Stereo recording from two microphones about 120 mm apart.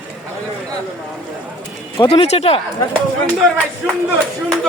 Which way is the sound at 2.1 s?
55° left (ahead or behind).